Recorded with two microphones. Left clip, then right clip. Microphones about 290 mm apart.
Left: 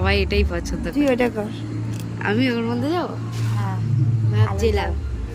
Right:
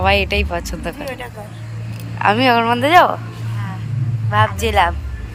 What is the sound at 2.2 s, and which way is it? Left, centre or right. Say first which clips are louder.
Speech: right 9 dB; centre.